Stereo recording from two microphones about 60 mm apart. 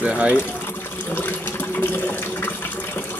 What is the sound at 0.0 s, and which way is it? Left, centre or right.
Speech, right.